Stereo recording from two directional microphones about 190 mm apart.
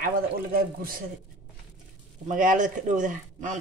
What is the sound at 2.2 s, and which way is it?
Speech, 45° right (ahead or behind).